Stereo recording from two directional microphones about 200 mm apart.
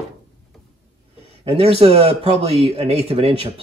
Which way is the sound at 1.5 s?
30° right (ahead or behind).